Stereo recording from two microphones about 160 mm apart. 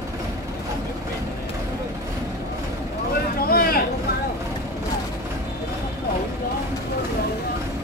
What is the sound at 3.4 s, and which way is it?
Vehicle, 70° left (ahead or behind).